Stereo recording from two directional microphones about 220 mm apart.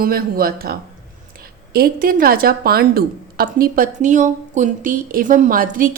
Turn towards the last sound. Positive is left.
turn(degrees=-40)  # may be behind; listen again after turning